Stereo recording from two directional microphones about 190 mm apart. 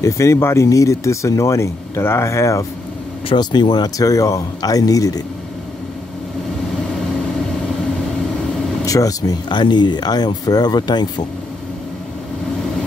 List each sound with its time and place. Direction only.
0.0 s speech: 15° left (ahead or behind)
8.8 s speech: 20° left (ahead or behind)